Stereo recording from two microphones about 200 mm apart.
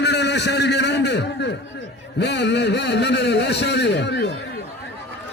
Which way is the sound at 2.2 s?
60° left (ahead or behind).